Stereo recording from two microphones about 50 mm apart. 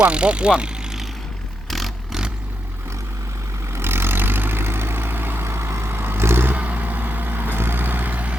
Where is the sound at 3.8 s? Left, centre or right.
Right.